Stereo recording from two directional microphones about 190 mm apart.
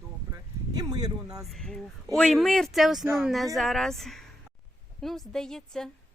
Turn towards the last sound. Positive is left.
turn(degrees=0)  # may be behind; listen again after turning